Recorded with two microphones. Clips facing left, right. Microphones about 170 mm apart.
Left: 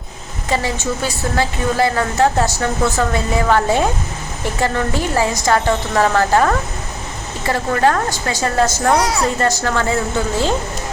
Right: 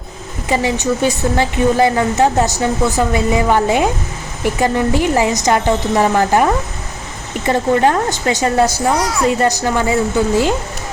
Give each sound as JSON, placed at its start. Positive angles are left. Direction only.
{"t": 0.4, "sound": "a woman's voice", "side_deg": -15}